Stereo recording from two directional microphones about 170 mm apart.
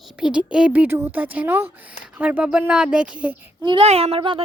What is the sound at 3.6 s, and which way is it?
Speech, 30° right (ahead or behind).